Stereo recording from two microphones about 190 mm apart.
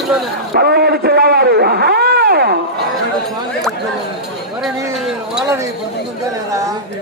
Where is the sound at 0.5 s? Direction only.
55° right (ahead or behind).